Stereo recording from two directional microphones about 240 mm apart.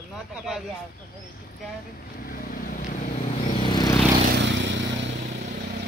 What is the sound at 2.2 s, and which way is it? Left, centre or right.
Vehicle, left.